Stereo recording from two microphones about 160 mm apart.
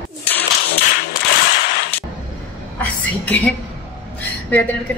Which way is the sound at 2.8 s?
10° left (ahead or behind).